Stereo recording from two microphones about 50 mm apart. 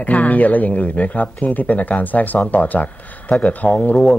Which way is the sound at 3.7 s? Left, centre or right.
Left.